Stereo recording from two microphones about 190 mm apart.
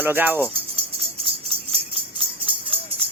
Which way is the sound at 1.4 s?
30° right (ahead or behind).